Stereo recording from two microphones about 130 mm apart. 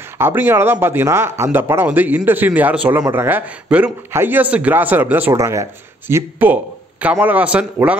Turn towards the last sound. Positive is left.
turn(degrees=-10)  # may be behind; listen again after turning